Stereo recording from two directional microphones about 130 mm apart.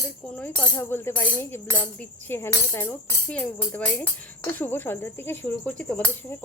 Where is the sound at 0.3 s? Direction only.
15° left (ahead or behind).